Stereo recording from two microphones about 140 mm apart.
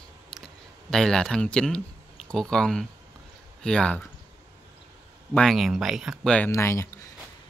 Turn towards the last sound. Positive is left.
turn(degrees=20)  # may be behind; listen again after turning